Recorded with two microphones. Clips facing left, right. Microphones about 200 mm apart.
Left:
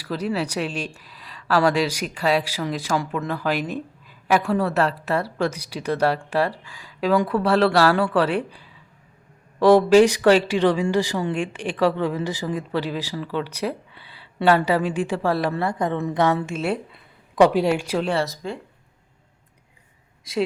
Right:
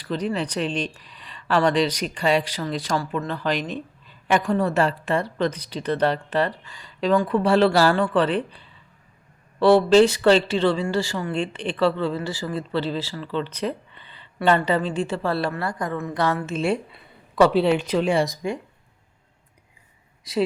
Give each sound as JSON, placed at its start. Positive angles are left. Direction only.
{"t": 0.0, "sound": "speech", "side_deg": 5}
{"t": 16.6, "sound": "speech", "side_deg": 5}
{"t": 18.0, "sound": "speech", "side_deg": -15}